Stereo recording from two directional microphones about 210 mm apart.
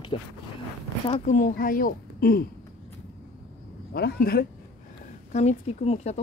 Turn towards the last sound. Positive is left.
turn(degrees=30)  # may be behind; listen again after turning